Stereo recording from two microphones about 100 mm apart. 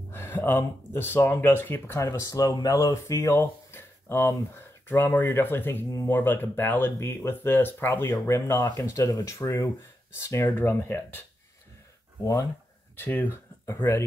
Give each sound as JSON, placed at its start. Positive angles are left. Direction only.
{"t": 0.1, "sound": "speech", "side_deg": 20}
{"t": 2.0, "sound": "speech", "side_deg": 35}
{"t": 12.9, "sound": "speech", "side_deg": 20}